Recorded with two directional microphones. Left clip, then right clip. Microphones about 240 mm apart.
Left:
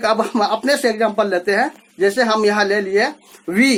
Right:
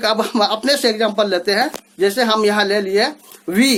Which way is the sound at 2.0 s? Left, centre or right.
Centre.